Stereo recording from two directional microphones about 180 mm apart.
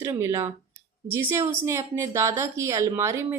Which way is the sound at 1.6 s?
15° right (ahead or behind).